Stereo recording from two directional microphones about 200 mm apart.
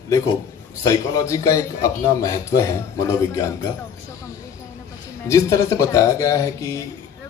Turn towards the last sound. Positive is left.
turn(degrees=15)  # may be behind; listen again after turning